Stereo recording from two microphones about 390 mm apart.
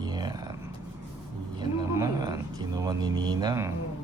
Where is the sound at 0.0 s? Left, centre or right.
Centre.